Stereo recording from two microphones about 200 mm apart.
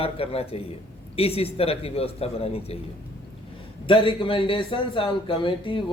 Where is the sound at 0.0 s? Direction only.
30° left (ahead or behind).